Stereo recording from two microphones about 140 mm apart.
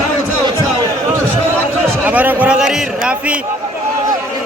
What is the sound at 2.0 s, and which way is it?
A man's voice, 10° right (ahead or behind).